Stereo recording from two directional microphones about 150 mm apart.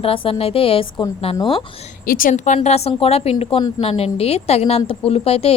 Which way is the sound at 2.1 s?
65° left (ahead or behind).